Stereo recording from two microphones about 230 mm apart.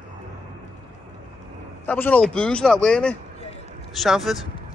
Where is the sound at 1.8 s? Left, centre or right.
Centre.